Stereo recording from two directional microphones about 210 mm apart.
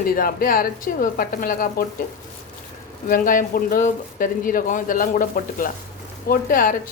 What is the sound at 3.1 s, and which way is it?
Speech, 40° left (ahead or behind).